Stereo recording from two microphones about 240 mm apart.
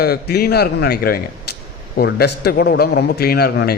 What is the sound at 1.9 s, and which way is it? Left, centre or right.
A man's voice, left.